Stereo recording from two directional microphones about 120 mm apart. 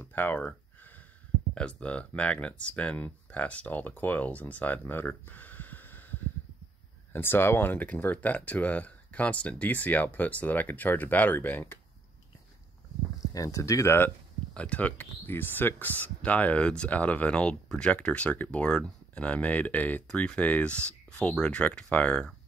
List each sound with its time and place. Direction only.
0.0 s speech: 15° left (ahead or behind)
13.3 s speech: 30° left (ahead or behind); by 22.3 s 10° left (ahead or behind)